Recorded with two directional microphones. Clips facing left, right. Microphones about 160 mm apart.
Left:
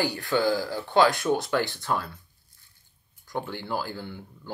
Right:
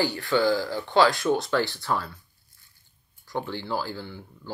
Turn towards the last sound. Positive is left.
turn(degrees=15)  # may be behind; listen again after turning